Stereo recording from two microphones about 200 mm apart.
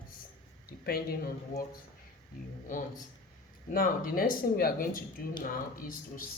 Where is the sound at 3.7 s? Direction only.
45° left (ahead or behind).